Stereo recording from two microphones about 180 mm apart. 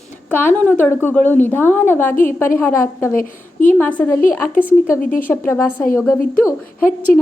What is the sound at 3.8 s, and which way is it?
Speech, 10° left (ahead or behind).